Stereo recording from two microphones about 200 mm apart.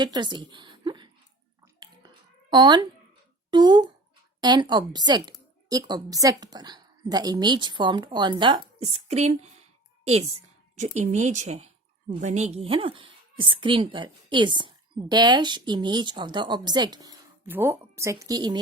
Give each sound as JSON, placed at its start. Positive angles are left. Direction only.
{"t": 0.0, "sound": "a woman's voice", "side_deg": -20}
{"t": 2.5, "sound": "speech", "side_deg": -20}